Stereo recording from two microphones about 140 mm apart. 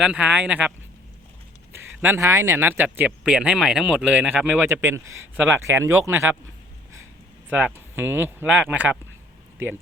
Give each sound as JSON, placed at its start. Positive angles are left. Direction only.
{"t": 0.0, "sound": "speech", "side_deg": -10}
{"t": 1.7, "sound": "speech", "side_deg": -15}
{"t": 7.5, "sound": "speech", "side_deg": -15}